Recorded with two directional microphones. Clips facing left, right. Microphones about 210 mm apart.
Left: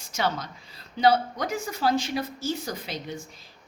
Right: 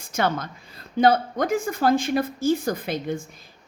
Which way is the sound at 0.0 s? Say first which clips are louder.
Right 4 dB; 55° right (ahead or behind).